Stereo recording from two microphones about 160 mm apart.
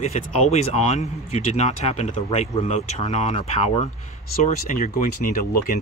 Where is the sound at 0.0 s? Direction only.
45° left (ahead or behind).